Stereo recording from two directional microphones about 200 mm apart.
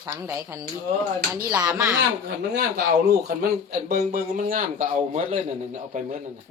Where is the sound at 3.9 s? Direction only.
45° right (ahead or behind).